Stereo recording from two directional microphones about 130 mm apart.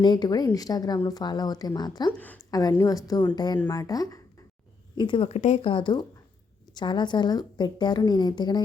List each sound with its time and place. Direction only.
0.0 s speech: 35° left (ahead or behind)
2.1 s a woman's voice: 10° left (ahead or behind)
2.5 s a woman's voice: 30° left (ahead or behind)
4.9 s speech: 40° left (ahead or behind)
5.3 s speech: 60° left (ahead or behind)
5.6 s speech: 40° left (ahead or behind)